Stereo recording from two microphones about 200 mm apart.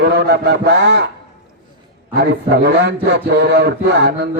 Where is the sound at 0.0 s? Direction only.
55° right (ahead or behind).